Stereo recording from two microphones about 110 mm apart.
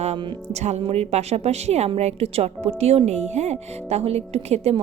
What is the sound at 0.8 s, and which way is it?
A woman's voice, 65° right (ahead or behind).